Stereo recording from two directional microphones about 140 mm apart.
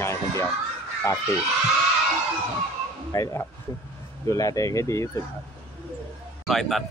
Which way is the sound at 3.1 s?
25° left (ahead or behind).